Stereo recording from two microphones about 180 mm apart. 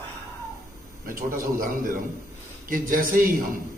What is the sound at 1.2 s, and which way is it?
A man's voice, 50° right (ahead or behind).